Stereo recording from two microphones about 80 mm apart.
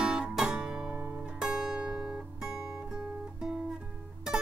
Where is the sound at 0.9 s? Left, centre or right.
Right.